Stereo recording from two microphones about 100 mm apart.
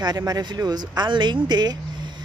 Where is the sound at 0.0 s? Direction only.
40° right (ahead or behind).